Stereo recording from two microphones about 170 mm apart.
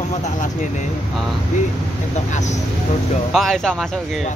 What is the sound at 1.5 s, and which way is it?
Speech, 45° left (ahead or behind).